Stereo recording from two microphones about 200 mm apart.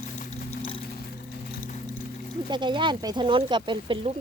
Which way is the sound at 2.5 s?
25° right (ahead or behind).